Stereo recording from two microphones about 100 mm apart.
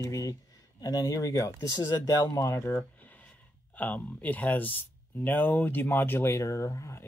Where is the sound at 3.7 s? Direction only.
15° left (ahead or behind).